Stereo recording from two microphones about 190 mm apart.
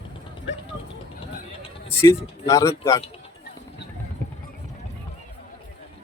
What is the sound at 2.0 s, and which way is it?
Speech, 15° left (ahead or behind).